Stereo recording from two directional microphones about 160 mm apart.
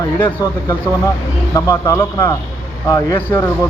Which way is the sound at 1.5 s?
20° left (ahead or behind).